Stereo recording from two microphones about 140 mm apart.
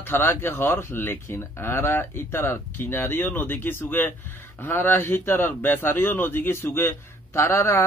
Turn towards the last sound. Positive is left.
turn(degrees=20)  # may be behind; listen again after turning